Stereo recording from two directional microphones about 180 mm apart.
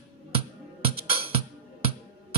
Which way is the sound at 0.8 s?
30° right (ahead or behind).